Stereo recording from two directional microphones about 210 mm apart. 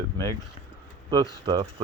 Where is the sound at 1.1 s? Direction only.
20° right (ahead or behind).